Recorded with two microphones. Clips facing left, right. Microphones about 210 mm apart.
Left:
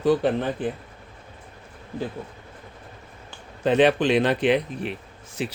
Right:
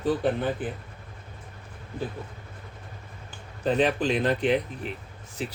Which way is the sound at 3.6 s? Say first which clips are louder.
Left 5 dB; 75° left (ahead or behind).